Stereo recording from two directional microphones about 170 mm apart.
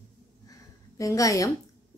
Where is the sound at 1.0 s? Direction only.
20° left (ahead or behind).